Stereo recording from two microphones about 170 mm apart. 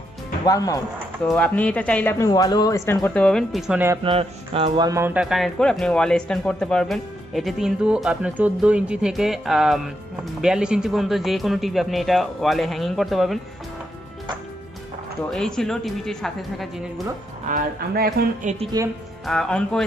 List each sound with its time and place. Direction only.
0.5 s speech: 20° left (ahead or behind)
1.2 s speech: 10° left (ahead or behind)
2.1 s speech: 20° left (ahead or behind); by 3.8 s centre (ahead or behind)
4.0 s music: 35° right (ahead or behind)
4.8 s a man's voice: 15° right (ahead or behind); by 13.4 s centre (ahead or behind)
15.2 s a man's voice: 5° left (ahead or behind)
17.5 s speech: 60° right (ahead or behind)
18.4 s a woman's voice: 45° right (ahead or behind)
19.2 s a man's voice: 5° left (ahead or behind)